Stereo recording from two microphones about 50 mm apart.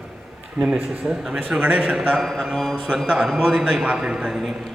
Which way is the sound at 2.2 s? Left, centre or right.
Centre.